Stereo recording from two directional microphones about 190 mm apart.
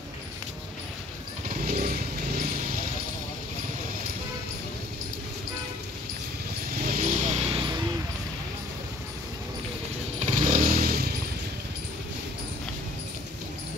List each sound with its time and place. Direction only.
1.6 s vehicle: 45° right (ahead or behind)
6.7 s vehicle: 50° right (ahead or behind); by 7.8 s 25° right (ahead or behind)
10.3 s motorcycle: 40° right (ahead or behind)